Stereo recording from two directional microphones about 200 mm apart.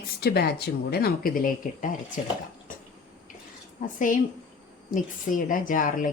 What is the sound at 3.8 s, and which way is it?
Speech, 40° left (ahead or behind).